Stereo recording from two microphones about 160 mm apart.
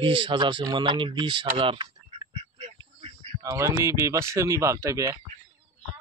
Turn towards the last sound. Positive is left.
turn(degrees=-20)  # may be behind; listen again after turning